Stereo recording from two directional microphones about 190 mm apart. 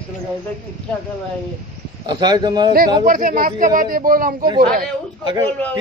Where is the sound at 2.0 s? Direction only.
20° right (ahead or behind).